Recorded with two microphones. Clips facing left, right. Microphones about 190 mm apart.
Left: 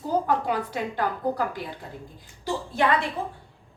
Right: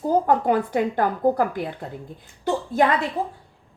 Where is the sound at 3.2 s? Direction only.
40° right (ahead or behind).